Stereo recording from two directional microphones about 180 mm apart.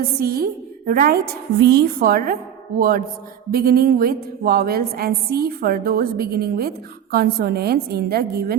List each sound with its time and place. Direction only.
0.2 s a woman's voice: 55° right (ahead or behind)